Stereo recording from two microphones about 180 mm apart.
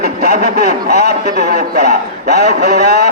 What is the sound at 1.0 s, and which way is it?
A man's voice, 65° right (ahead or behind).